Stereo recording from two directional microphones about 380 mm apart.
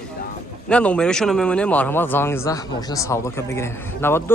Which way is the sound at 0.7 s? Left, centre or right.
Centre.